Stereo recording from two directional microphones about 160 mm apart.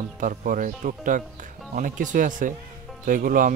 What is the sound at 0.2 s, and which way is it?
Speech, 55° right (ahead or behind).